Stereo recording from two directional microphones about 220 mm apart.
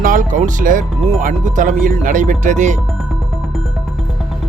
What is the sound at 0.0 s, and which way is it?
Speech, 35° right (ahead or behind).